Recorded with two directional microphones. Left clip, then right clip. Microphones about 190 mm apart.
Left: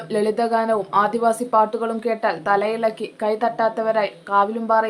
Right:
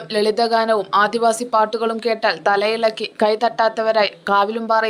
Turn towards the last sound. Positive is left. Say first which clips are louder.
# right 1 dB
turn(degrees=-45)  # may be behind; listen again after turning